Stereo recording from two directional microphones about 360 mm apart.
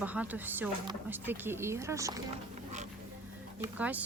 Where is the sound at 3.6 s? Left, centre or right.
Centre.